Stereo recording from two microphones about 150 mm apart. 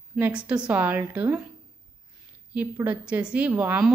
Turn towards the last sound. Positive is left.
turn(degrees=-10)  # may be behind; listen again after turning